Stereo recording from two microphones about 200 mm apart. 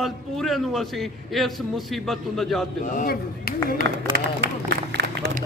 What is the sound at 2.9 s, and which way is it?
Speech, 45° left (ahead or behind).